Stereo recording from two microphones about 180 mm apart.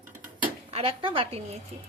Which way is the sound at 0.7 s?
35° right (ahead or behind).